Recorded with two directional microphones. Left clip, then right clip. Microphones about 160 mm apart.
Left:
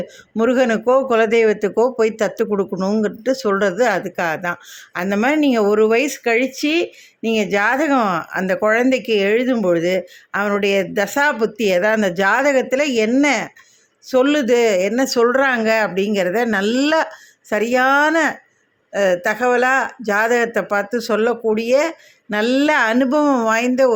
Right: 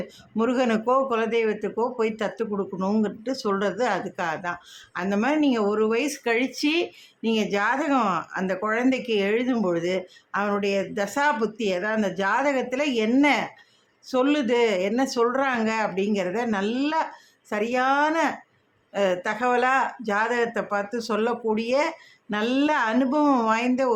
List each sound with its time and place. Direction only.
0.3 s speech: 25° left (ahead or behind)
2.7 s speech: 25° left (ahead or behind)